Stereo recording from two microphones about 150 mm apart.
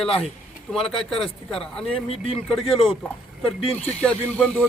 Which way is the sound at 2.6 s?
35° left (ahead or behind).